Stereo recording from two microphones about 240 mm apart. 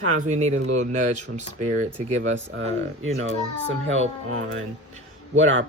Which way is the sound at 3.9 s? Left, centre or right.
Right.